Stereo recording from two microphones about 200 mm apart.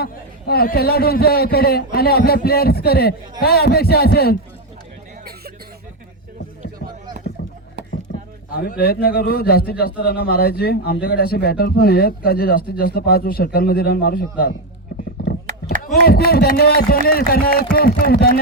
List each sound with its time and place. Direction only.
0.0 s a man's voice: 50° left (ahead or behind)
6.6 s a sound: 45° right (ahead or behind)
8.5 s a man's voice: 50° left (ahead or behind)
15.8 s a man's voice: 50° left (ahead or behind)